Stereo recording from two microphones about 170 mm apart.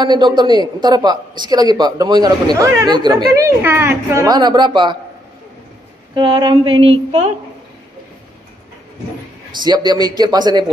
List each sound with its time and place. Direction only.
0.0 s speech: 25° right (ahead or behind)
6.1 s speech: 25° right (ahead or behind)
9.6 s speech: 25° right (ahead or behind)